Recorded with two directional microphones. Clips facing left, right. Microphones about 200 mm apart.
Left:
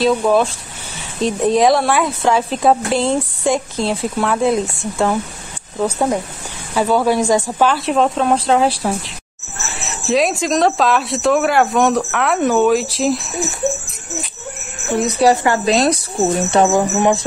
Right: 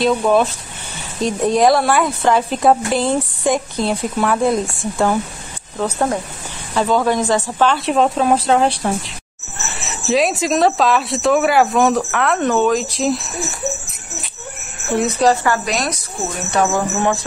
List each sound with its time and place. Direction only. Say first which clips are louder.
0.0 s a woman's voice: even; centre (ahead or behind)
14.9 s a woman's voice: even; centre (ahead or behind)
15.4 s speech: left 5 dB; 25° left (ahead or behind)